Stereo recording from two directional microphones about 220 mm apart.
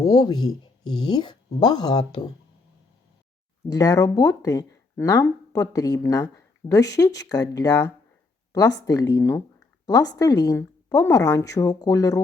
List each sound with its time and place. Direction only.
0.0 s speech: 15° left (ahead or behind)
3.7 s speech: 15° left (ahead or behind)